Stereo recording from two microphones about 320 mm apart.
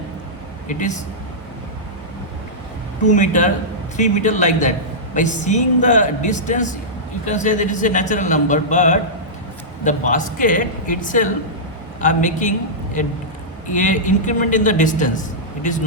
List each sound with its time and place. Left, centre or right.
0.7 s a man's voice: left
3.1 s a man's voice: left